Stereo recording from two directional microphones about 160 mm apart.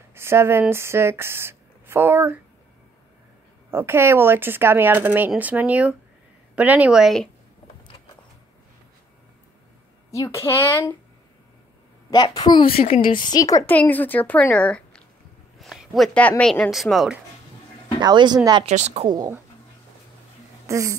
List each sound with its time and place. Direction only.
0.1 s speech: 15° right (ahead or behind)
3.7 s speech: 15° right (ahead or behind)
10.1 s a woman's voice: 20° left (ahead or behind)
12.1 s a woman's voice: 30° left (ahead or behind)
13.7 s a woman's voice: 10° left (ahead or behind)
18.0 s speech: 25° right (ahead or behind)
18.7 s a woman's voice: 45° right (ahead or behind)
19.0 s speech: 25° right (ahead or behind)
20.6 s speech: 20° right (ahead or behind)